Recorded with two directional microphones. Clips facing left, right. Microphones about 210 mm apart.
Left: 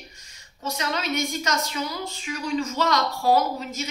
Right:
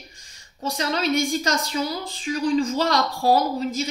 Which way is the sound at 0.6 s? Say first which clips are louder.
Right 4 dB; 35° right (ahead or behind).